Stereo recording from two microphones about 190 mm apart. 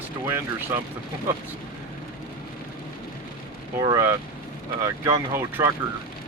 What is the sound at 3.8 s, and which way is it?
Speech, 15° right (ahead or behind).